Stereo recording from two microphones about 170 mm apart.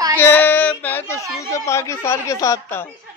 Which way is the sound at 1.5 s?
15° left (ahead or behind).